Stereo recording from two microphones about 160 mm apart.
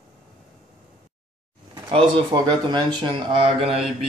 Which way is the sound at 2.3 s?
30° right (ahead or behind).